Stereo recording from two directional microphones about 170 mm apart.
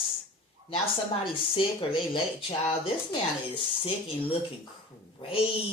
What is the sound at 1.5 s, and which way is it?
Speech, 30° left (ahead or behind).